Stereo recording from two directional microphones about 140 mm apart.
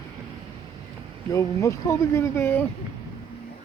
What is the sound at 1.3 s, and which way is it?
Speech, 20° left (ahead or behind).